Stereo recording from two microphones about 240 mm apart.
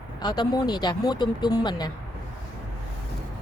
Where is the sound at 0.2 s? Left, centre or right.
Centre.